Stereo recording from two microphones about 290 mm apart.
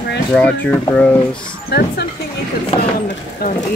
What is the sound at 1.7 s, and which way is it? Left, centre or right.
Speech, left.